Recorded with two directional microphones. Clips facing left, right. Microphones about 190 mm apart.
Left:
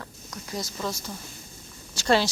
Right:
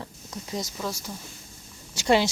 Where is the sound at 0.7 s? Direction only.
10° right (ahead or behind).